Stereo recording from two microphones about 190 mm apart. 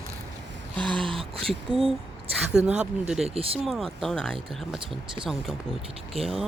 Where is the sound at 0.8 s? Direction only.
Centre (ahead or behind).